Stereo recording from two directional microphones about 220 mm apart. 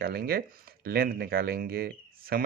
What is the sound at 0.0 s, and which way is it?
Speech, 45° right (ahead or behind).